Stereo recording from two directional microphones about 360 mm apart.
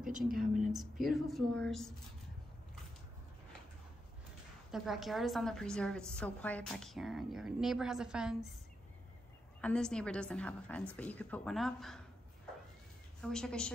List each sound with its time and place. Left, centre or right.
0.3 s a woman's voice: right
1.0 s a woman's voice: centre
4.6 s a woman's voice: centre
9.6 s a woman's voice: centre
13.2 s a woman's voice: centre